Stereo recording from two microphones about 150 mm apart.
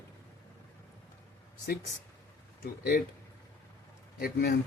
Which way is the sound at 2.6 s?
85° left.